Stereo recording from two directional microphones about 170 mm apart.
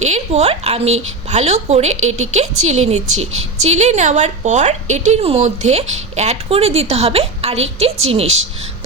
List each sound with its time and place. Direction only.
0.0 s a woman's voice: 40° right (ahead or behind)